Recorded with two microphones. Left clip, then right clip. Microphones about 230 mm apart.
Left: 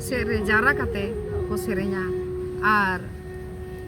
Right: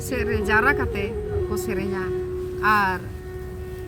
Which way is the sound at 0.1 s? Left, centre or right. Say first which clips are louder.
Right 1 dB; centre.